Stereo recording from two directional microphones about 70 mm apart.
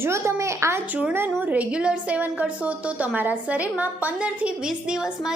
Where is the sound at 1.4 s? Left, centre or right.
Right.